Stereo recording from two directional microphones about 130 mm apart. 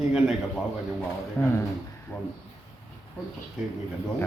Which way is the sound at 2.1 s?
15° left (ahead or behind).